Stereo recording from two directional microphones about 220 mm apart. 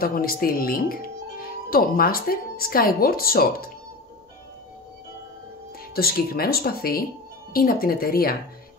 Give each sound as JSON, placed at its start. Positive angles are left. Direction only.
{"t": 0.0, "sound": "speech", "side_deg": 40}
{"t": 5.9, "sound": "speech", "side_deg": 45}